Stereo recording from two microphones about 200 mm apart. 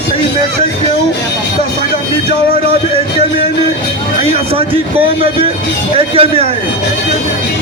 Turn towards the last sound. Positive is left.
turn(degrees=-30)  # may be behind; listen again after turning